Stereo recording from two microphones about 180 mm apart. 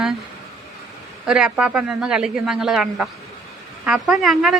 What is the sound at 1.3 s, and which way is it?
Speech, 5° right (ahead or behind).